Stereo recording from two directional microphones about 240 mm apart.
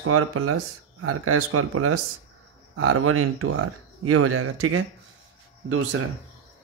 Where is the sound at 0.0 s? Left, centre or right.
Right.